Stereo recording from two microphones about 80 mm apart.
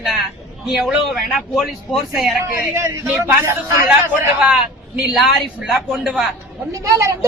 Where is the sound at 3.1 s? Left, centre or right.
Right.